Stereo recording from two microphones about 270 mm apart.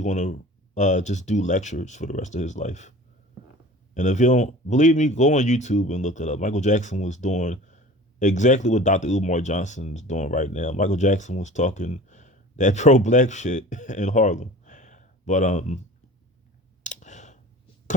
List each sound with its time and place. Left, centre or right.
0.0 s speech: left
3.9 s speech: left
16.8 s clicking: left